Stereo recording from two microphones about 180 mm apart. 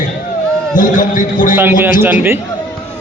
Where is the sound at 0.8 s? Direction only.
45° left (ahead or behind).